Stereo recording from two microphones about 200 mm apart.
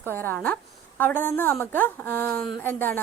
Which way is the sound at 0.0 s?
10° left (ahead or behind).